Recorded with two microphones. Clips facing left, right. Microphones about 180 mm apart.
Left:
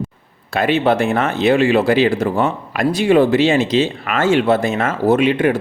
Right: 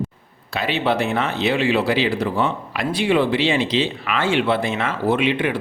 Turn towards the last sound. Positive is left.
turn(degrees=45)  # may be behind; listen again after turning